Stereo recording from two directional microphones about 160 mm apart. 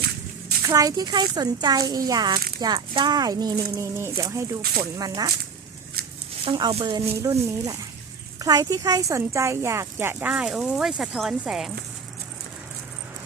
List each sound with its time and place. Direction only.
0.7 s speech: 20° right (ahead or behind)
6.4 s speech: 35° right (ahead or behind)
7.2 s speech: 20° right (ahead or behind); by 11.7 s 5° right (ahead or behind)